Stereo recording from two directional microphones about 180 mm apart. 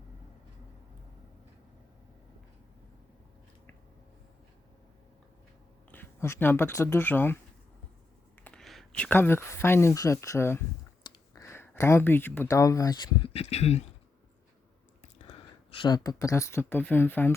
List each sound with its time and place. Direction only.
5.9 s speech: 15° left (ahead or behind)
8.4 s speech: centre (ahead or behind); by 13.8 s 35° left (ahead or behind)
15.8 s speech: 20° left (ahead or behind)